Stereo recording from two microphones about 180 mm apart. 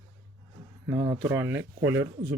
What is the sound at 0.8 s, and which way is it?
Speech, 10° right (ahead or behind).